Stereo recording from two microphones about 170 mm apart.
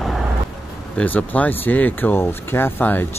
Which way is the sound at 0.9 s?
10° left (ahead or behind).